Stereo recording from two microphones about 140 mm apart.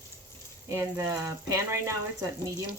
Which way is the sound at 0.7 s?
20° right (ahead or behind).